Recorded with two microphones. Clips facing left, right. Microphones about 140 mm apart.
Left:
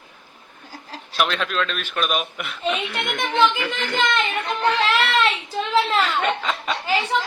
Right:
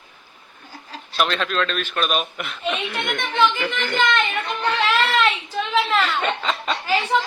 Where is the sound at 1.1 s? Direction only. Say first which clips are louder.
Right 1 dB; 5° left (ahead or behind).